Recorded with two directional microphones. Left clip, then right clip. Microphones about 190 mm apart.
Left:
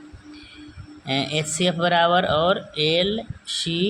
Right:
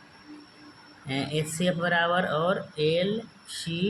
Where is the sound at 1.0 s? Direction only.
35° left (ahead or behind).